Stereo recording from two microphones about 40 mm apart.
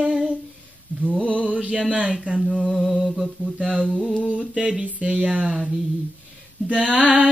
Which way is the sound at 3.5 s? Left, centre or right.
Right.